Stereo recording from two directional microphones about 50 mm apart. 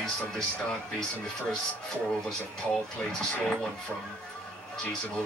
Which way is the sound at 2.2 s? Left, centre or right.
Centre.